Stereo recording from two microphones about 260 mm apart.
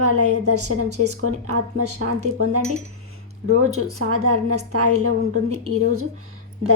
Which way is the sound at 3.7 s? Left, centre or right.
Right.